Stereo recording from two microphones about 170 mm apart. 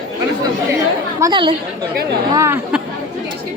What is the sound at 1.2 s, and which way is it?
Speech, 30° right (ahead or behind).